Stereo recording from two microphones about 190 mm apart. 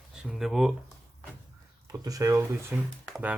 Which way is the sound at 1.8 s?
20° right (ahead or behind).